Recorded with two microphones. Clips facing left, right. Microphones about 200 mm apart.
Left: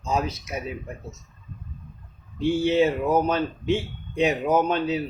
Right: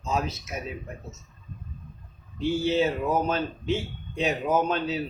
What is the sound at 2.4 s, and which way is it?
Speech, 15° left (ahead or behind).